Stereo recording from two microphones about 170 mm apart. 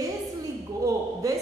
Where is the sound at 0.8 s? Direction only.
20° right (ahead or behind).